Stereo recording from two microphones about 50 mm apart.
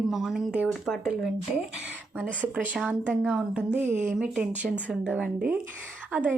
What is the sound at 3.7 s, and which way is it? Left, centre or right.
Speech, right.